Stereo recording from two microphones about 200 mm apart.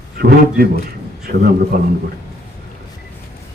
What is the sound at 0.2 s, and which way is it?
A man's voice, 50° right (ahead or behind).